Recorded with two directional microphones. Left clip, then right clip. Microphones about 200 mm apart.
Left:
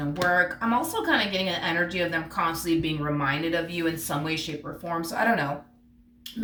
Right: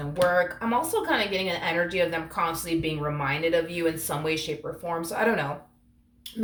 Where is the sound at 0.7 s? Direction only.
35° right (ahead or behind).